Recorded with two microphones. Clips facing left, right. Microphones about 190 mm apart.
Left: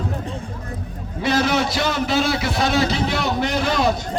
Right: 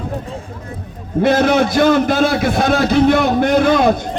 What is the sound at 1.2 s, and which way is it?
A man's voice, 55° right (ahead or behind).